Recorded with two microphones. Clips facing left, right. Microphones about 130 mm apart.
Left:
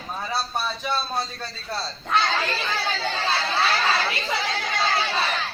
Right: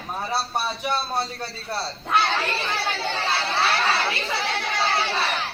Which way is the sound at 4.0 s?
30° right (ahead or behind).